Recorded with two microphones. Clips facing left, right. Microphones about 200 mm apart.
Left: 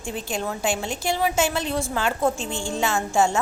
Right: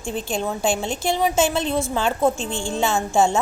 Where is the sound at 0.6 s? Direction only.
25° right (ahead or behind).